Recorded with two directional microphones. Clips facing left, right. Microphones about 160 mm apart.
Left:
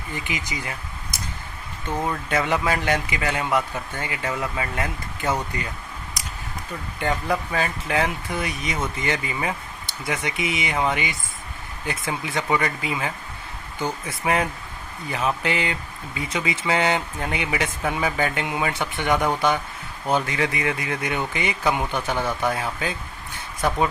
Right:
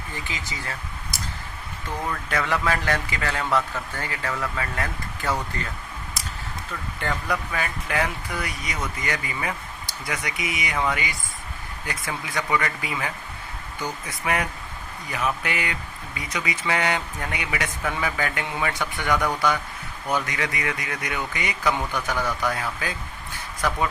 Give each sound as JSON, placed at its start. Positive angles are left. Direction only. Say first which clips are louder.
{"t": 0.1, "sound": "speech", "louder": "left 6 dB", "side_deg": 15}
{"t": 7.0, "sound": "speech", "louder": "left 4 dB", "side_deg": 25}